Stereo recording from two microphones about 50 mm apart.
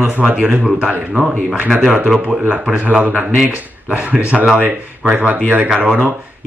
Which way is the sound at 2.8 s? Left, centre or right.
Right.